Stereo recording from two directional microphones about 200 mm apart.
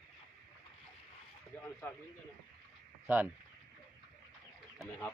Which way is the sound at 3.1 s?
10° right (ahead or behind).